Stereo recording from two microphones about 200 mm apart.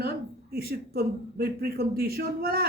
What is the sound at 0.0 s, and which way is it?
Speech, 50° right (ahead or behind).